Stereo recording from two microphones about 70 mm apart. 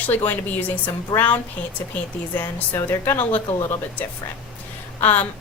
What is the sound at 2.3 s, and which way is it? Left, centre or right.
A woman's voice, left.